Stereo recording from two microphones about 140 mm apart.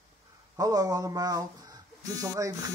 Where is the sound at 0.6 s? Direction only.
25° right (ahead or behind).